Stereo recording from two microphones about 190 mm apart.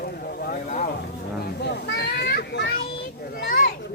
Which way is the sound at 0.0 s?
55° left (ahead or behind).